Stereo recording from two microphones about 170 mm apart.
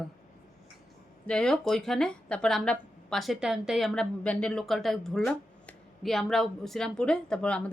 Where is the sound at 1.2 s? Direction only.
5° left (ahead or behind).